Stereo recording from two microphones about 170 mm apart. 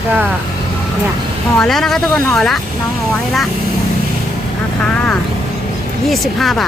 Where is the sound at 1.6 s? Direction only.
5° left (ahead or behind).